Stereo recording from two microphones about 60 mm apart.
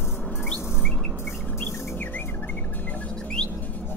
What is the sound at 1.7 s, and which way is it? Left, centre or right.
Chirp, left.